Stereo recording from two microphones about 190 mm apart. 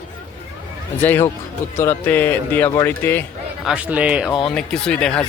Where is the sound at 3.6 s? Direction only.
5° right (ahead or behind).